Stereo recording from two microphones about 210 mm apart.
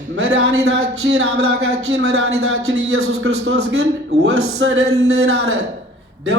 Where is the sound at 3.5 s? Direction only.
55° right (ahead or behind).